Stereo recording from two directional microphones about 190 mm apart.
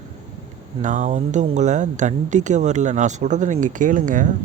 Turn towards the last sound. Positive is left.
turn(degrees=-40)  # may be behind; listen again after turning